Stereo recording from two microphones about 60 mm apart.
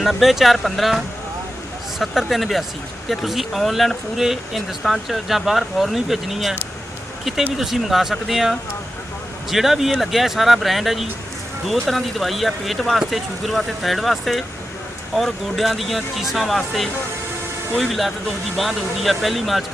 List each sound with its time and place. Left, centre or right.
0.0 s speech: centre